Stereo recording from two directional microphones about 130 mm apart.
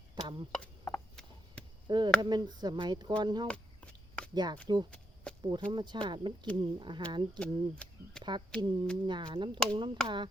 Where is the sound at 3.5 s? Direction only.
10° left (ahead or behind).